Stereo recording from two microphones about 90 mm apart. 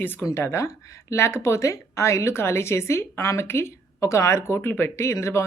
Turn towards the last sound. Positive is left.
turn(degrees=30)  # may be behind; listen again after turning